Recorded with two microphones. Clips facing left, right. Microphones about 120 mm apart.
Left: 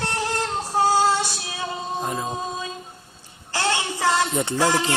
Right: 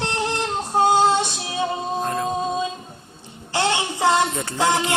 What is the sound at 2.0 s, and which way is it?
Music, 10° left (ahead or behind).